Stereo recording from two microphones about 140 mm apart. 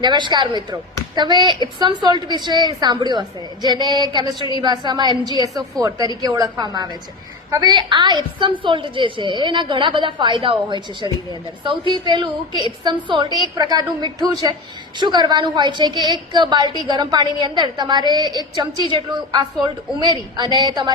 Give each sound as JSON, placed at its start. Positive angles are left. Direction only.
{"t": 0.0, "sound": "a woman's voice", "side_deg": -35}